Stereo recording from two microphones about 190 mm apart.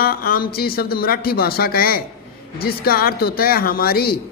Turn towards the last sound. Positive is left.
turn(degrees=50)  # may be behind; listen again after turning